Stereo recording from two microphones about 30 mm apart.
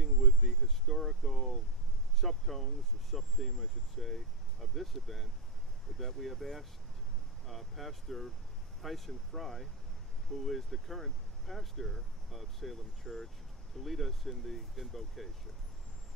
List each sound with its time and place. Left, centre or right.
0.5 s a sound: centre
2.1 s vehicle: centre
5.9 s speech: centre